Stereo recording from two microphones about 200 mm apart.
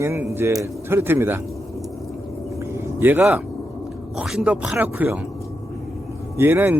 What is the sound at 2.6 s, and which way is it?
Vehicle, 10° right (ahead or behind).